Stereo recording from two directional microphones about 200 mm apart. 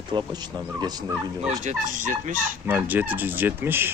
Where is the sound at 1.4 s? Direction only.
40° right (ahead or behind).